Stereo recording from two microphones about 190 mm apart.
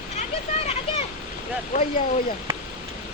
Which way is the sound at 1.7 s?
45° left (ahead or behind).